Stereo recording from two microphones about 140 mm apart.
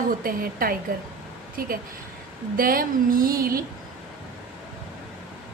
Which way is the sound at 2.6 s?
90° right.